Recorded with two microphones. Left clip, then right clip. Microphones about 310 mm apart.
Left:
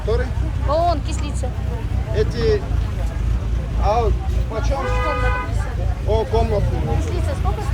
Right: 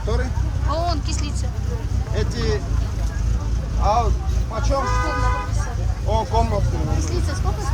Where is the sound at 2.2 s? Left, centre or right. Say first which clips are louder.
Left 7 dB; right.